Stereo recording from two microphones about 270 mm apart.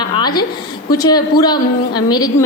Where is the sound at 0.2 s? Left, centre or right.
Centre.